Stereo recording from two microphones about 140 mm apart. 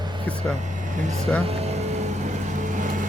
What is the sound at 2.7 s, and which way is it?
Vehicle, 65° right (ahead or behind).